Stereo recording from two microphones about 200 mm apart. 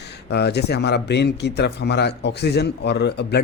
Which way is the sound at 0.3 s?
55° left (ahead or behind).